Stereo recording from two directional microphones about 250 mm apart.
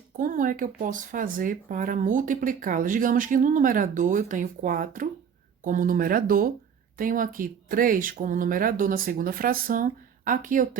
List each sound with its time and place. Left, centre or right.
0.2 s speech: right